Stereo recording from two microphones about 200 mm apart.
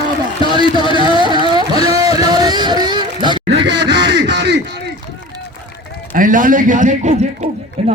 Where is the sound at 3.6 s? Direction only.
60° right (ahead or behind).